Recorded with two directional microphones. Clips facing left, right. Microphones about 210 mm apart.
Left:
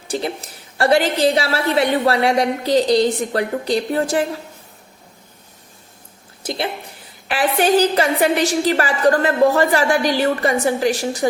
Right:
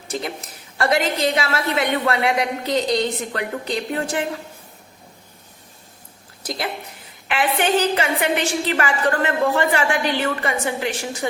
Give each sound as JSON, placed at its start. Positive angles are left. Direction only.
{"t": 0.1, "sound": "a woman's voice", "side_deg": 30}
{"t": 6.4, "sound": "a sound", "side_deg": 25}
{"t": 7.3, "sound": "a woman's voice", "side_deg": 35}